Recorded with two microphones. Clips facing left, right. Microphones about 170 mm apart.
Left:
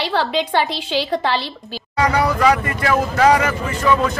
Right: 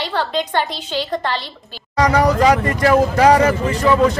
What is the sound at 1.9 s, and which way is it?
Speech, 40° right (ahead or behind).